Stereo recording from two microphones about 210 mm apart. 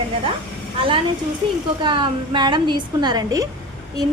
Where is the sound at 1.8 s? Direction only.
20° right (ahead or behind).